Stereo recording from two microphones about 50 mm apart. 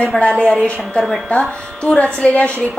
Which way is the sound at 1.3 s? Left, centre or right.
Left.